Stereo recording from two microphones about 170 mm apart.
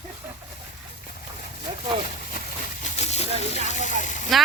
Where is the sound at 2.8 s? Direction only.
40° left (ahead or behind).